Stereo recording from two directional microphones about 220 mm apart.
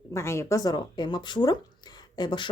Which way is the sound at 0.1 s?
10° left (ahead or behind).